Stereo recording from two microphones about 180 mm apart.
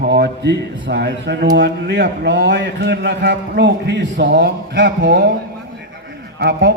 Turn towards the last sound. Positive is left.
turn(degrees=-70)  # may be behind; listen again after turning